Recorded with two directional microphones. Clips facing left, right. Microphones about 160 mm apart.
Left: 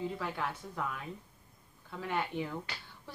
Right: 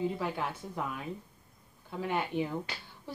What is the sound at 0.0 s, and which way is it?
Speech, 20° right (ahead or behind).